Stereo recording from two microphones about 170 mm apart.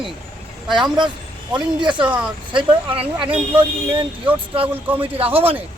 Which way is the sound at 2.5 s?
30° right (ahead or behind).